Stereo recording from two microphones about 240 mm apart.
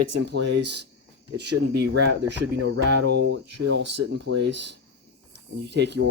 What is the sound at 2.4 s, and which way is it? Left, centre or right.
Speech, right.